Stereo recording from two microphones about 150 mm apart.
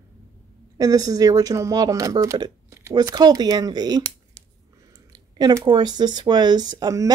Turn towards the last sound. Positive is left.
turn(degrees=-25)  # may be behind; listen again after turning